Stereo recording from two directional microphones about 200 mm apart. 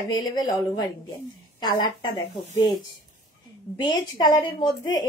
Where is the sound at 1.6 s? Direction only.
20° left (ahead or behind).